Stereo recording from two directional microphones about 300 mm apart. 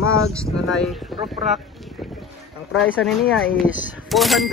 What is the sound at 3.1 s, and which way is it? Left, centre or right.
Speech, centre.